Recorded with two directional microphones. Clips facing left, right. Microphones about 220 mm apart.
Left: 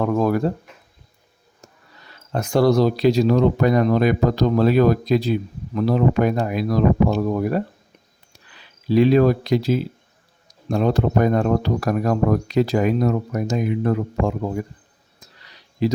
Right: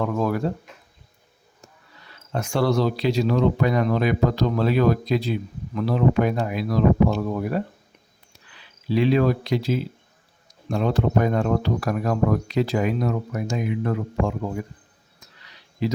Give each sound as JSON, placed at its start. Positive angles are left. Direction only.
{"t": 0.0, "sound": "speech", "side_deg": 45}
{"t": 2.3, "sound": "speech", "side_deg": 40}
{"t": 8.9, "sound": "speech", "side_deg": 40}
{"t": 15.8, "sound": "speech", "side_deg": 35}